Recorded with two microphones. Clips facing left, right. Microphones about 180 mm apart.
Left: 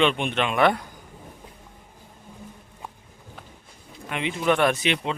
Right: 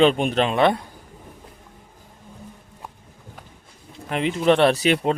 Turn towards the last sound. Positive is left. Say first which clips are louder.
# right 5 dB
turn(degrees=-45)  # may be behind; listen again after turning